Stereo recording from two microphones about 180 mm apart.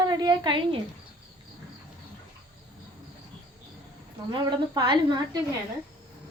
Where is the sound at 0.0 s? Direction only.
20° right (ahead or behind).